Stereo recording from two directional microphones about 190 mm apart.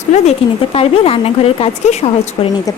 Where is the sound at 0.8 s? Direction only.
30° left (ahead or behind).